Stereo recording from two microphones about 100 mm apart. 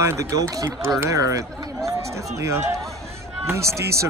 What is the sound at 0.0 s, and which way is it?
Speech, 30° right (ahead or behind).